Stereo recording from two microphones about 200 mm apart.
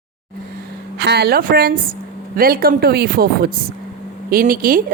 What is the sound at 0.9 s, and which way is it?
Speech, 55° right (ahead or behind).